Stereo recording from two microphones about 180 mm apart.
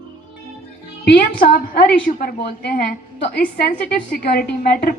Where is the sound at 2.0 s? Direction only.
60° left (ahead or behind).